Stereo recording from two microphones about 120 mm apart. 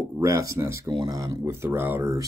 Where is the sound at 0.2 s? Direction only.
25° right (ahead or behind).